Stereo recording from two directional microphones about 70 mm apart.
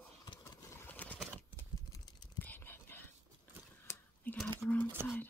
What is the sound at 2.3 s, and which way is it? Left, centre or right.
Whispering, left.